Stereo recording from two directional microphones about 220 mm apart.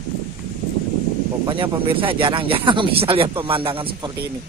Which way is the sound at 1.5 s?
25° right (ahead or behind).